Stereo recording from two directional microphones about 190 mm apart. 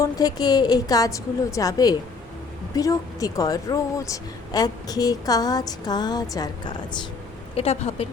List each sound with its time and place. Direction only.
0.0 s a woman's voice: 20° left (ahead or behind)
7.5 s a woman's voice: 35° left (ahead or behind)